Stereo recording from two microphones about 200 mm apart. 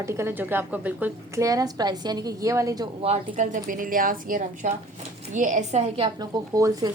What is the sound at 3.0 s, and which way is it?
A woman's voice, 35° right (ahead or behind).